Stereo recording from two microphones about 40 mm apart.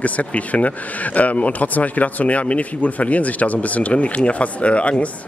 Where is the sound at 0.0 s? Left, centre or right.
Left.